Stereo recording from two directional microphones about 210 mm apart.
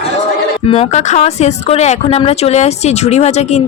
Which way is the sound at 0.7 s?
30° left (ahead or behind).